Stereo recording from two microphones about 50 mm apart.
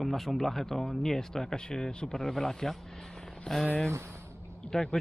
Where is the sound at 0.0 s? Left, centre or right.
Centre.